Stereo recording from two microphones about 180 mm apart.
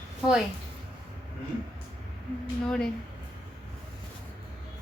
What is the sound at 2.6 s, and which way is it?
Speech, 5° left (ahead or behind).